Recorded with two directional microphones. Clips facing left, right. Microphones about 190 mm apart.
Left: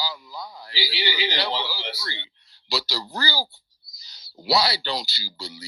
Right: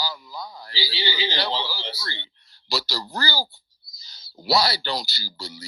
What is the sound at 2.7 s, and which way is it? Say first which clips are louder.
Speech: even; 45° right (ahead or behind).